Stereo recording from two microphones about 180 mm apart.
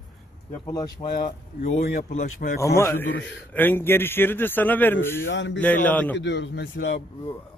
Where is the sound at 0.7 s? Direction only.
20° left (ahead or behind).